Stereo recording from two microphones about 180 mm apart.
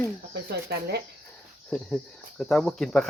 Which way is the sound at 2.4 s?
Centre (ahead or behind).